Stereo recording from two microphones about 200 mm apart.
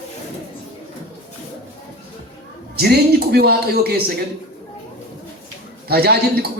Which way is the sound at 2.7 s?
50° right (ahead or behind).